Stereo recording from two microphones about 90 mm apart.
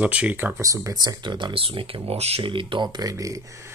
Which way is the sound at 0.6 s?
35° right (ahead or behind).